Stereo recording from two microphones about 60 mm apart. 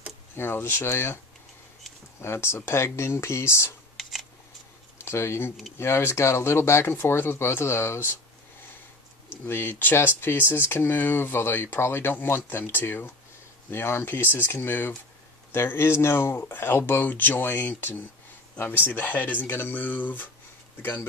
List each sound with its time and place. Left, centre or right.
0.4 s speech: left
3.9 s a sound: centre
5.0 s speech: left
9.5 s speech: left
15.5 s speech: left